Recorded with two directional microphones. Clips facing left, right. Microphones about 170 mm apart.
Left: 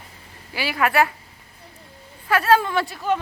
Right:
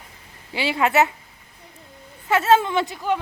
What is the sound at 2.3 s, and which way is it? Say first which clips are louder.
Speech: right 1 dB; 25° right (ahead or behind).